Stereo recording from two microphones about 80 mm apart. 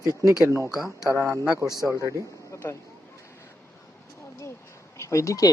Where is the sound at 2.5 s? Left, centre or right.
Left.